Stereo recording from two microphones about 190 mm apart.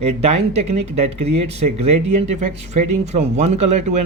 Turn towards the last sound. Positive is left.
turn(degrees=-40)  # may be behind; listen again after turning